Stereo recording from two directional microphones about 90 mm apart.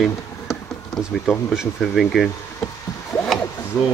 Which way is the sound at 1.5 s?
5° right (ahead or behind).